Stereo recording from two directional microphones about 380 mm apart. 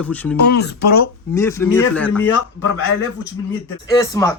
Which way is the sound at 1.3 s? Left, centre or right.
Centre.